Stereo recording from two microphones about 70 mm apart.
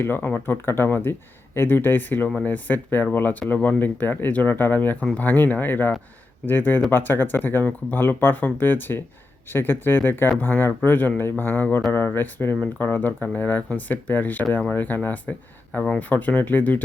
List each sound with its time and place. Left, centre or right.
0.0 s speech: left